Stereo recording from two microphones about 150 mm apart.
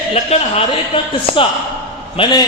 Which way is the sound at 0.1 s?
45° left (ahead or behind).